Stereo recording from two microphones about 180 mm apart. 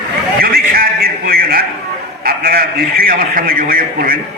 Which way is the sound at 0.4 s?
55° right (ahead or behind).